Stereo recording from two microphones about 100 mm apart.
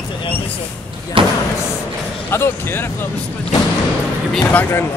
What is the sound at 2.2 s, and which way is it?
Music, 25° left (ahead or behind).